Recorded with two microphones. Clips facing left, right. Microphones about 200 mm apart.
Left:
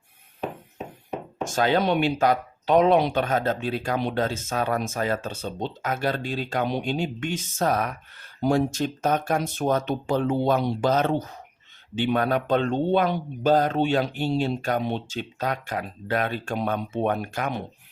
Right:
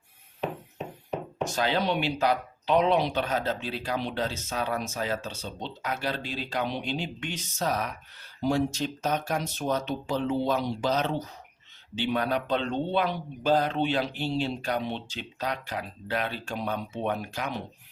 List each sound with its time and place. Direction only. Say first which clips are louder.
1.5 s speech: left 6 dB; 50° left (ahead or behind)